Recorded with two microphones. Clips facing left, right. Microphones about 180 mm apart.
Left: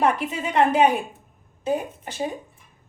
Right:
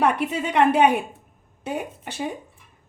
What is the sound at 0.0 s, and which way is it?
A woman's voice, 70° right (ahead or behind).